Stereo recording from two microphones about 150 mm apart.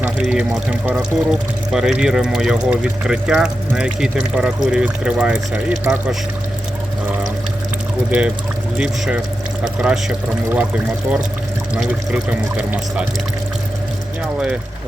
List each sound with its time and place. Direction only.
0.0 s speech: 5° right (ahead or behind)
8.8 s speech: 5° right (ahead or behind)
11.7 s speech: 5° right (ahead or behind)